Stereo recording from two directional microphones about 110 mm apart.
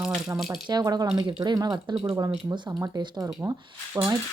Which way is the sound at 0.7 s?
40° right (ahead or behind).